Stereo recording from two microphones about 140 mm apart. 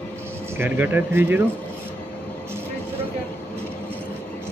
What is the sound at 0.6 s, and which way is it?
Speech, 15° right (ahead or behind).